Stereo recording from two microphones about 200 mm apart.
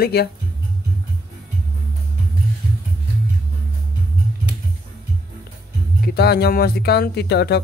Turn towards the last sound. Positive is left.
turn(degrees=55)  # may be behind; listen again after turning